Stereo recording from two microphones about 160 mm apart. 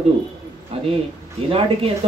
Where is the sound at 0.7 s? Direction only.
40° right (ahead or behind).